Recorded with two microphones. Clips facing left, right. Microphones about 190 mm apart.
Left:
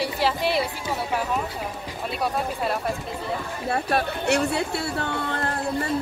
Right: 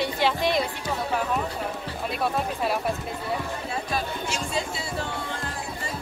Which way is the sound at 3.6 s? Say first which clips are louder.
Left 5 dB; 65° left (ahead or behind).